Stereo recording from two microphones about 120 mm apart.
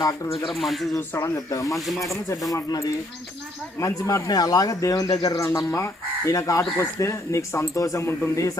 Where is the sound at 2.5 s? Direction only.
25° left (ahead or behind).